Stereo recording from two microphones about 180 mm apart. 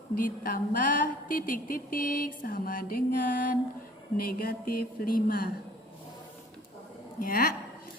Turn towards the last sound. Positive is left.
turn(degrees=55)  # may be behind; listen again after turning